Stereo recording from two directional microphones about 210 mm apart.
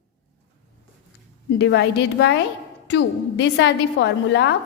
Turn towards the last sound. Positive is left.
turn(degrees=55)  # may be behind; listen again after turning